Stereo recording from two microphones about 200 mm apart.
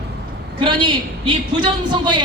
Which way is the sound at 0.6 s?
25° right (ahead or behind).